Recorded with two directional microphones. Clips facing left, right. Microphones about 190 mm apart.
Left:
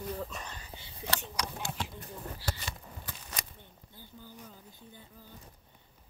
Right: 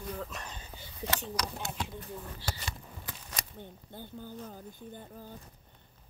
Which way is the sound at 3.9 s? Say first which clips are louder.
Right 7 dB; 55° right (ahead or behind).